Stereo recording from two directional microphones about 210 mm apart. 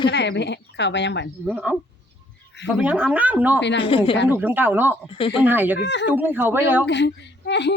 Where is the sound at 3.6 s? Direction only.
55° left (ahead or behind).